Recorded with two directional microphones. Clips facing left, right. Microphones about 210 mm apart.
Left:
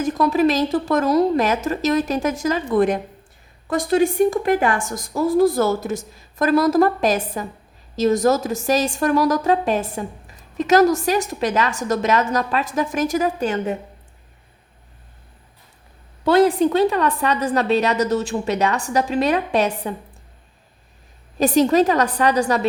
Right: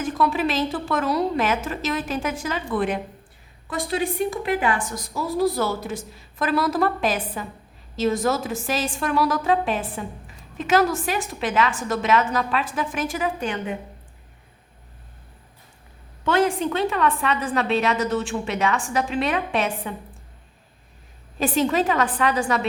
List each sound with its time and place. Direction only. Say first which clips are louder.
0.0 s a woman's voice: left 5 dB; 40° left (ahead or behind)
16.2 s a woman's voice: left 6 dB; 35° left (ahead or behind)
21.3 s a woman's voice: left 6 dB; 40° left (ahead or behind)